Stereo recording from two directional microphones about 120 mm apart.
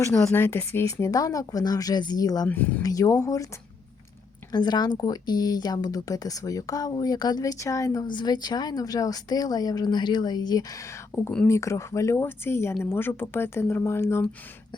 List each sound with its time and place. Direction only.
0.2 s speech: 20° left (ahead or behind)
2.5 s speech: 15° left (ahead or behind)
2.8 s speech: 30° left (ahead or behind)
4.5 s speech: 35° left (ahead or behind)
11.1 s speech: 10° left (ahead or behind)
11.4 s speech: 25° left (ahead or behind)